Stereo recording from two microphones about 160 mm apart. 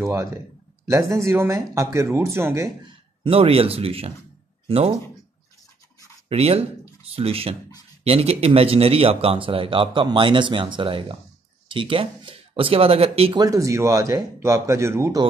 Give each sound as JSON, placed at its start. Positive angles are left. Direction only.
{"t": 0.0, "sound": "speech", "side_deg": -20}
{"t": 3.3, "sound": "speech", "side_deg": -40}
{"t": 6.2, "sound": "speech", "side_deg": -40}
{"t": 13.3, "sound": "speech", "side_deg": -20}